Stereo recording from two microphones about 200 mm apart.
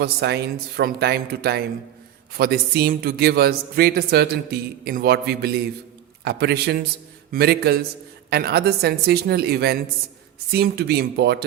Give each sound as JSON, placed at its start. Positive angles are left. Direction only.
{"t": 0.0, "sound": "speech", "side_deg": -55}